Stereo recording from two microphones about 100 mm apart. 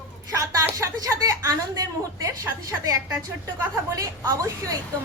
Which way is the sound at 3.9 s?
35° right (ahead or behind).